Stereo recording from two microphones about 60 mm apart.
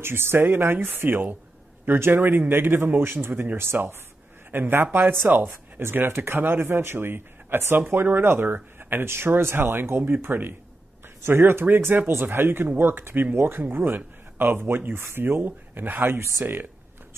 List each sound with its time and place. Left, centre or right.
0.0 s speech: right